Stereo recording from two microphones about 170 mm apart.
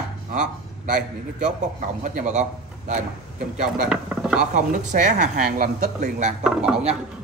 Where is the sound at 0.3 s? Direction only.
45° right (ahead or behind).